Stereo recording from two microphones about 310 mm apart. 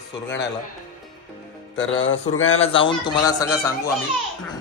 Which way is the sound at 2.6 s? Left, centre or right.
Centre.